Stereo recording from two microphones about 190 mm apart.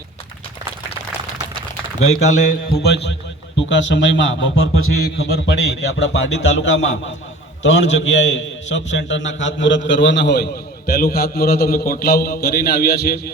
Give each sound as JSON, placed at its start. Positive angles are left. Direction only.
{"t": 2.0, "sound": "speech", "side_deg": 90}
{"t": 2.7, "sound": "a man's voice", "side_deg": 60}